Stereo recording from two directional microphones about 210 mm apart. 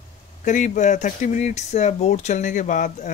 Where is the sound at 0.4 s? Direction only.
40° left (ahead or behind).